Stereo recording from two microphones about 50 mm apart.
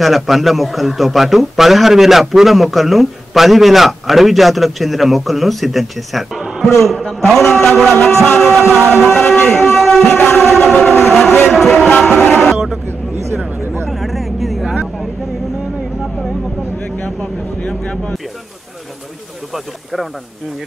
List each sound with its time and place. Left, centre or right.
0.0 s a man's voice: centre
9.0 s music: centre
10.6 s train: centre
11.4 s speech: centre
12.0 s music: centre
12.8 s vehicle: right
13.8 s vehicle: centre
16.7 s a sound: left
17.6 s speech: left
19.5 s a man's voice: centre